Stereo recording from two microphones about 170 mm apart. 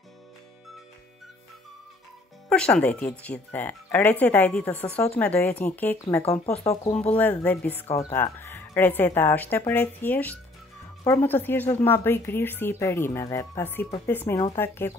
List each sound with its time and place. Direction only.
2.5 s speech: 5° left (ahead or behind)